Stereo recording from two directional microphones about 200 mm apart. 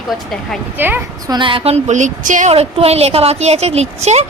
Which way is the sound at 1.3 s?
25° right (ahead or behind).